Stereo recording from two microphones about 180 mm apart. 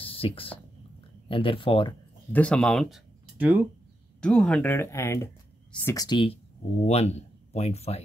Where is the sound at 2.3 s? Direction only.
5° left (ahead or behind).